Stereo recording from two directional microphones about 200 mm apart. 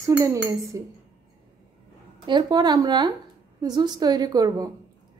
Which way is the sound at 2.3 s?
20° right (ahead or behind).